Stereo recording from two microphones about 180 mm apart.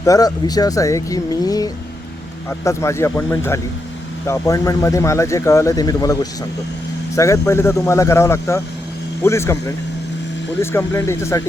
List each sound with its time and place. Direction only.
0.0 s speech: 20° left (ahead or behind)
7.2 s speech: 15° left (ahead or behind)